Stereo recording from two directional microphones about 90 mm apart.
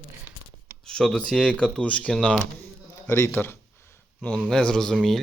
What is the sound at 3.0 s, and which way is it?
Speech, 25° left (ahead or behind).